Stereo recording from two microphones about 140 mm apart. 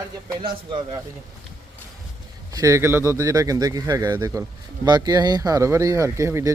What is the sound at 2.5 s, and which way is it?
Speech, 20° right (ahead or behind).